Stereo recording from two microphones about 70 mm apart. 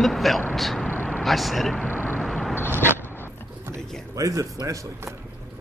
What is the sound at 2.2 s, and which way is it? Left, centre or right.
Vehicle, centre.